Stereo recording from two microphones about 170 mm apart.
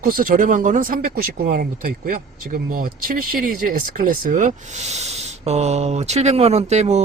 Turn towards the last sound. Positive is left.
turn(degrees=-40)  # may be behind; listen again after turning